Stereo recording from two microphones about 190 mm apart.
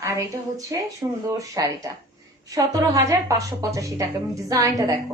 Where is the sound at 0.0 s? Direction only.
15° right (ahead or behind).